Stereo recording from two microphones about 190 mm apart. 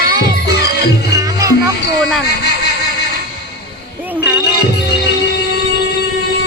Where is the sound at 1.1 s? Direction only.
15° right (ahead or behind).